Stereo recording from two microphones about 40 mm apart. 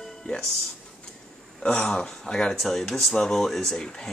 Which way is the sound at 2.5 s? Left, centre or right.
Centre.